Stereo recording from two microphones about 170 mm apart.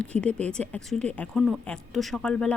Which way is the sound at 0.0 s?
5° left (ahead or behind).